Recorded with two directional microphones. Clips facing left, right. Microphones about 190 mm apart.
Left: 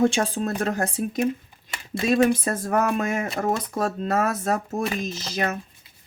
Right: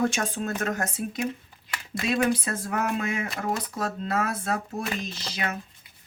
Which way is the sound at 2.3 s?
45° left (ahead or behind).